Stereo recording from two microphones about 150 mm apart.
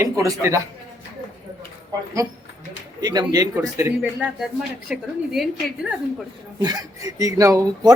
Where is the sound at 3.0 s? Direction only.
25° right (ahead or behind).